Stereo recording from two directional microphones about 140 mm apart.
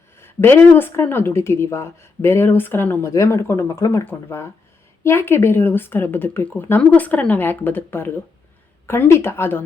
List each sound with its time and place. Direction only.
0.2 s a woman's voice: 15° left (ahead or behind)